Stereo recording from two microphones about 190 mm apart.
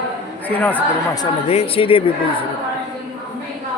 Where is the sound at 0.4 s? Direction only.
10° left (ahead or behind).